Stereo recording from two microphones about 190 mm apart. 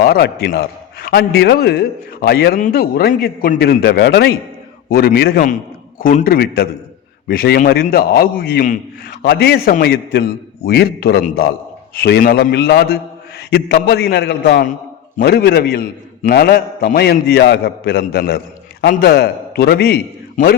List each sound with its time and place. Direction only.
0.0 s a man's voice: 55° left (ahead or behind)
9.2 s a man's voice: 60° left (ahead or behind)